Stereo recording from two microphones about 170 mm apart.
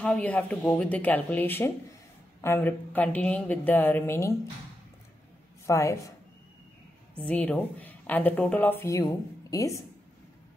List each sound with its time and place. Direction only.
0.0 s speech: 10° left (ahead or behind)
5.7 s speech: 20° left (ahead or behind)
7.2 s speech: 5° left (ahead or behind)